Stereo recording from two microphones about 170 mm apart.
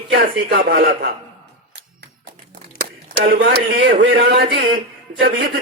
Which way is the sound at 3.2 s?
75° right (ahead or behind).